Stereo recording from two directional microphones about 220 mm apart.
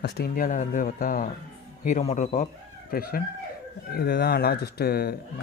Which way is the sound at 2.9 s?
40° left (ahead or behind).